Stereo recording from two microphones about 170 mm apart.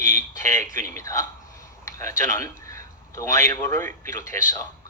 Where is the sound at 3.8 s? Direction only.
15° left (ahead or behind).